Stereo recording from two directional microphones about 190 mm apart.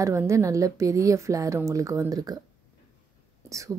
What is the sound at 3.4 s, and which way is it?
Speech, 15° right (ahead or behind).